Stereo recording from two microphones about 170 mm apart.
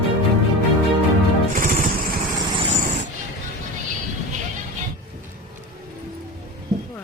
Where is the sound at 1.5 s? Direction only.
50° right (ahead or behind).